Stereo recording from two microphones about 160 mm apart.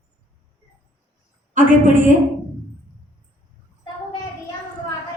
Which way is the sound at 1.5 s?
55° right (ahead or behind).